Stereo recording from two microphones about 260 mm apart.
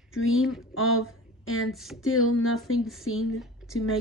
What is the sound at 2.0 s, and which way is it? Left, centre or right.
Speech, left.